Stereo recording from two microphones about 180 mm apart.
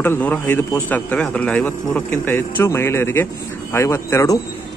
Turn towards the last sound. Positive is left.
turn(degrees=15)  # may be behind; listen again after turning